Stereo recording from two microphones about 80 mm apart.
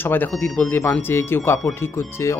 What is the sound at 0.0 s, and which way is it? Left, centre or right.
Speech, left.